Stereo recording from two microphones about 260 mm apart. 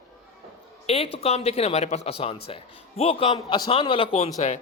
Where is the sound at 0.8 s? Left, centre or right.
Left.